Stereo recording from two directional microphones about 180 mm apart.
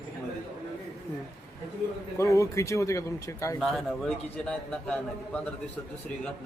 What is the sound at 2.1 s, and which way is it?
Speech, 15° left (ahead or behind).